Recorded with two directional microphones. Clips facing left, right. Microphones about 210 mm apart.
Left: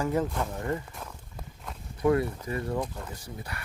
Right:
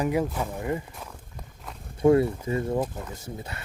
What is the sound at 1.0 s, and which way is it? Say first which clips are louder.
Walk: even; centre (ahead or behind).